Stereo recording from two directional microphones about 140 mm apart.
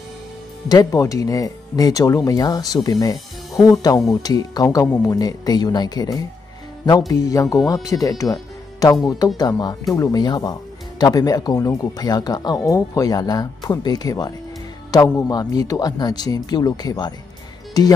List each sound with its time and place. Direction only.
0.7 s speech: 25° left (ahead or behind)